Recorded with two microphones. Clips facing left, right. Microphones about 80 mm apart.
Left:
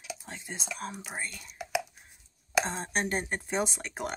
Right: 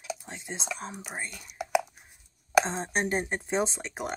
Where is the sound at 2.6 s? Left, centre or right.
Right.